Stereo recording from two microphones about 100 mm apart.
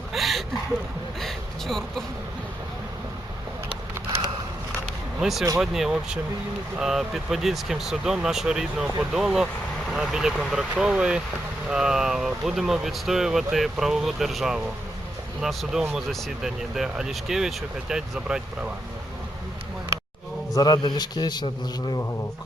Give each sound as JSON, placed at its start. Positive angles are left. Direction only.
{"t": 0.1, "sound": "a sound", "side_deg": 0}
{"t": 1.2, "sound": "vehicle", "side_deg": 5}
{"t": 5.2, "sound": "speech", "side_deg": 0}
{"t": 20.6, "sound": "a man's voice", "side_deg": 45}